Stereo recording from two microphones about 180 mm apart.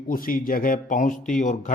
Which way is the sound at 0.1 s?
50° left (ahead or behind).